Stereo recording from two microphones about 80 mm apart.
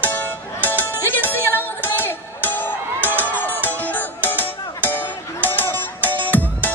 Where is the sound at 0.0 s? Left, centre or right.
Left.